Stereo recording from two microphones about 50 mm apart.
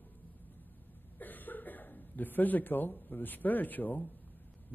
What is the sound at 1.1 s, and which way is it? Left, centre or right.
A man's voice, left.